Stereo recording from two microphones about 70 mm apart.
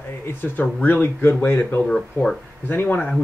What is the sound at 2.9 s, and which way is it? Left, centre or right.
Speech, centre.